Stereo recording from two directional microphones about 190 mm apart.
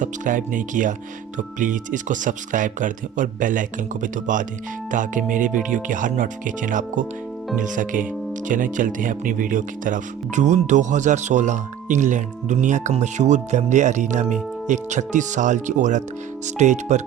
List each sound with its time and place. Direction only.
0.0 s speech: 45° right (ahead or behind)